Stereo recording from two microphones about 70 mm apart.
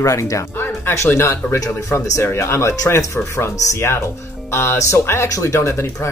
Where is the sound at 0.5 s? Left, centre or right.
Left.